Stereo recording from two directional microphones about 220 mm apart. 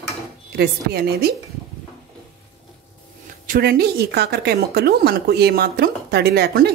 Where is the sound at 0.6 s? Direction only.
45° right (ahead or behind).